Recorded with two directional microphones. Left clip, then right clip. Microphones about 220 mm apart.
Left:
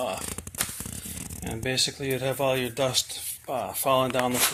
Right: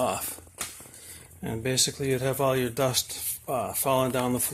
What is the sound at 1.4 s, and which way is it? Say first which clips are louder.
Speech: even; 20° right (ahead or behind).